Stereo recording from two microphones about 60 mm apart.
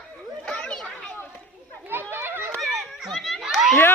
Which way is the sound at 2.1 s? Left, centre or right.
Right.